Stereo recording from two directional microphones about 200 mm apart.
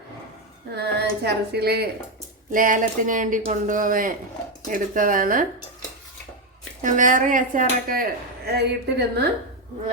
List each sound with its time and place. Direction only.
0.8 s speech: 55° right (ahead or behind)
2.5 s speech: 40° right (ahead or behind)
6.8 s speech: 40° right (ahead or behind)
8.4 s speech: 55° right (ahead or behind)